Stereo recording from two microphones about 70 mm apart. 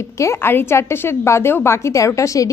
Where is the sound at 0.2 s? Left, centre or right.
Left.